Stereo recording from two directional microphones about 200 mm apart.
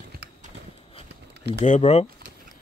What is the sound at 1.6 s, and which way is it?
Speech, 35° left (ahead or behind).